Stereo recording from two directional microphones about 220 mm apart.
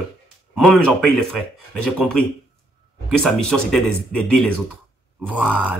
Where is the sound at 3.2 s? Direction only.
Centre (ahead or behind).